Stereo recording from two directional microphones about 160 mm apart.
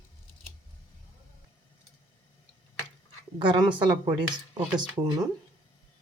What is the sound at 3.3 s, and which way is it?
Speech, 30° right (ahead or behind).